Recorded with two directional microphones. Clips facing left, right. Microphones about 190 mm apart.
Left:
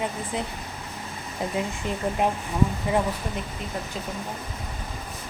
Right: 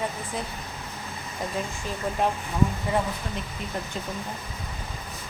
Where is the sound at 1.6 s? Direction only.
15° left (ahead or behind).